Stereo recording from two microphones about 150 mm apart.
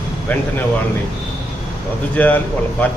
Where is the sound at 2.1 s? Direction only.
10° left (ahead or behind).